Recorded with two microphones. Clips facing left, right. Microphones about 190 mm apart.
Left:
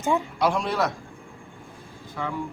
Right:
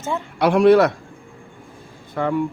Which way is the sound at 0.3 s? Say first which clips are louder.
Right 11 dB; 65° right (ahead or behind).